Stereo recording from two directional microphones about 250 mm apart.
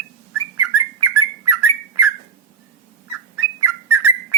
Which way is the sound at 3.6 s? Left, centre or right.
Centre.